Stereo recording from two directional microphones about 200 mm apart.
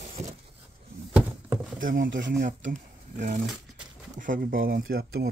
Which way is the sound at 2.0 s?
65° right (ahead or behind).